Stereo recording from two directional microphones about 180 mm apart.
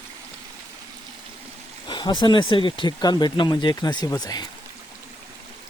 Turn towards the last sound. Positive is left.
turn(degrees=20)  # may be behind; listen again after turning